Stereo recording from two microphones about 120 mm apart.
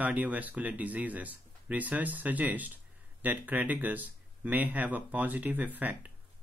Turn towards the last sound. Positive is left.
turn(degrees=-15)  # may be behind; listen again after turning